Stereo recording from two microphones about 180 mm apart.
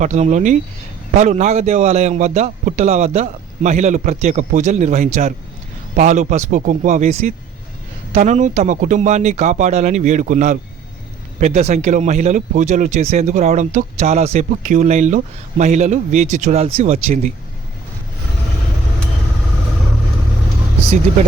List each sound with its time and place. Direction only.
0.0 s speech: 45° right (ahead or behind)